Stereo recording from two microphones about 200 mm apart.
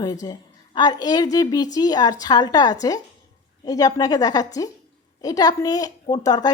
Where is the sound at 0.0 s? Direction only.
20° left (ahead or behind).